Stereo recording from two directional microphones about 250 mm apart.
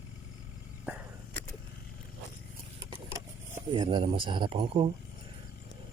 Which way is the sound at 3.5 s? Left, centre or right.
Centre.